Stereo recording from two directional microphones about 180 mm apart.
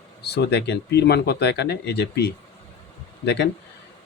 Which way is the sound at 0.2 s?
65° left (ahead or behind).